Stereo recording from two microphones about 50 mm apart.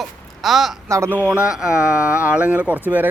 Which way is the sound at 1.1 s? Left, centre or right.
Right.